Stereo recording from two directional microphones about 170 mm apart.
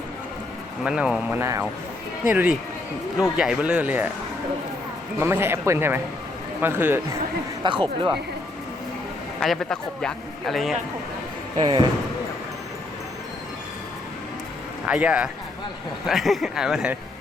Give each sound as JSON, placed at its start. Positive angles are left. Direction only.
{"t": 0.8, "sound": "speech", "side_deg": -5}
{"t": 1.4, "sound": "speech", "side_deg": -15}
{"t": 5.2, "sound": "speech", "side_deg": -15}
{"t": 7.6, "sound": "speech", "side_deg": -25}
{"t": 9.4, "sound": "speech", "side_deg": 0}
{"t": 11.5, "sound": "speech", "side_deg": -30}
{"t": 14.8, "sound": "speech", "side_deg": -5}